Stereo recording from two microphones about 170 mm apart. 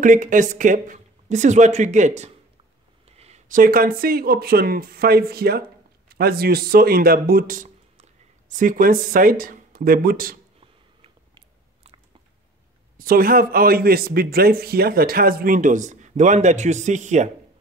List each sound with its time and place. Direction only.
0.0 s a man's voice: 50° right (ahead or behind)
10.6 s biting: 35° right (ahead or behind)
12.9 s a man's voice: 60° right (ahead or behind)